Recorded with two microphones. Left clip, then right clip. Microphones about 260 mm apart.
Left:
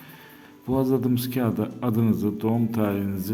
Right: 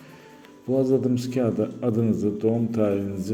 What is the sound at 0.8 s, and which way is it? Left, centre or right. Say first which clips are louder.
A man's voice: right 2 dB; left.